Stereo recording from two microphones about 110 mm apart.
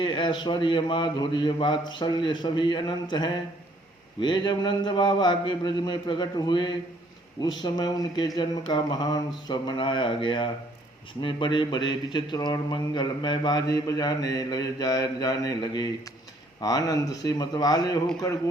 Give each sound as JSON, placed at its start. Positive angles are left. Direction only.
{"t": 0.0, "sound": "a man's voice", "side_deg": 45}